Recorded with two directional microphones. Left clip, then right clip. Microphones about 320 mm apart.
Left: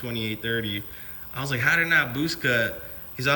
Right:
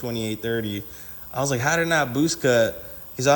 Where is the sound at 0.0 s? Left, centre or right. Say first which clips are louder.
Right 3 dB; centre.